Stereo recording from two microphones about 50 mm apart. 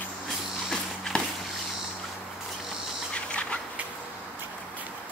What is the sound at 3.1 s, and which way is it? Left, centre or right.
Duck, left.